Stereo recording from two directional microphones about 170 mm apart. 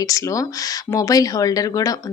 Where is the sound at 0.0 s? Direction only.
20° left (ahead or behind).